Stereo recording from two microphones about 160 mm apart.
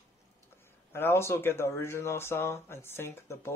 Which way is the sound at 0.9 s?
15° left (ahead or behind).